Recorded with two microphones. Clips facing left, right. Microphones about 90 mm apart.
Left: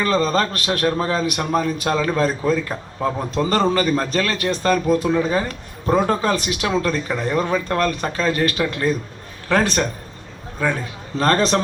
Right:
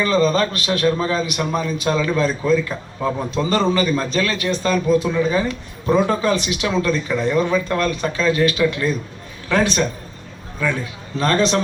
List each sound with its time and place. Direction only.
0.0 s a man's voice: 40° left (ahead or behind)
11.2 s a man's voice: 45° left (ahead or behind)